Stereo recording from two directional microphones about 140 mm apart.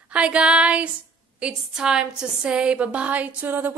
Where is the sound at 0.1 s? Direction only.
10° right (ahead or behind).